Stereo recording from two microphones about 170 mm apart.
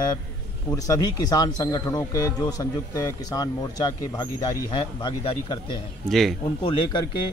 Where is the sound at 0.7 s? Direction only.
20° left (ahead or behind).